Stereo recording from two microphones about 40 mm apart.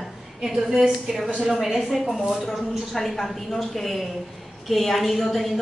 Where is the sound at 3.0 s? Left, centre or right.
Centre.